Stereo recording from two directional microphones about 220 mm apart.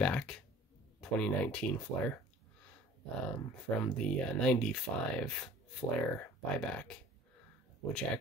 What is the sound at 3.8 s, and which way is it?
Speech, 5° left (ahead or behind).